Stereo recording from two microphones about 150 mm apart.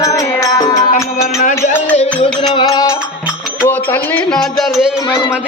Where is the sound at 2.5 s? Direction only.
30° left (ahead or behind).